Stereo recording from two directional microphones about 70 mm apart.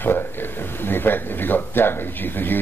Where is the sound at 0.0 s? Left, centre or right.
Left.